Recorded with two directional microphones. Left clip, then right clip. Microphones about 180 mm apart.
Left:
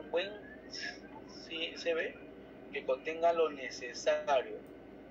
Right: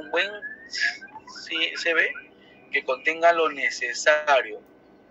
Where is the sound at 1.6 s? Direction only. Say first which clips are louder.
Right 13 dB; 50° right (ahead or behind).